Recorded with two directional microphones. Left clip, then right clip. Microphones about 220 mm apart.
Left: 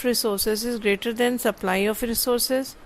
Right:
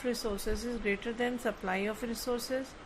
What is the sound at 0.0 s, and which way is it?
Speech, 45° left (ahead or behind).